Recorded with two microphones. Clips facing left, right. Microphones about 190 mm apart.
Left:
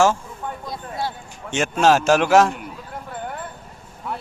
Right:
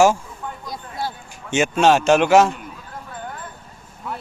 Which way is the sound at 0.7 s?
Centre (ahead or behind).